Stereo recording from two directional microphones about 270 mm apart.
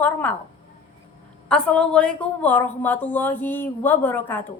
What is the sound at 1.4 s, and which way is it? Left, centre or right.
A woman's voice, centre.